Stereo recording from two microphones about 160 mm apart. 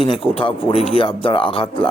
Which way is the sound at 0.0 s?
35° left (ahead or behind).